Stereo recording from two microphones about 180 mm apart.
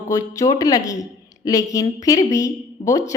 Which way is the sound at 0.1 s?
20° left (ahead or behind).